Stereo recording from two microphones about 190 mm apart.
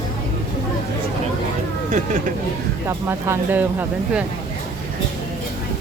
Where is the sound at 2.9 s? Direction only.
15° right (ahead or behind).